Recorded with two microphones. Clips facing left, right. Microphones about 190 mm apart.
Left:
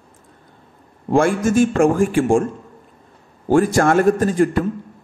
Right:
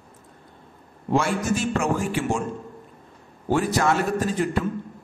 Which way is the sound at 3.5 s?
45° left (ahead or behind).